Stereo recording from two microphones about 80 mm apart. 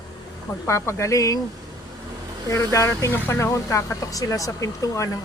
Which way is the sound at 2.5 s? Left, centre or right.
Left.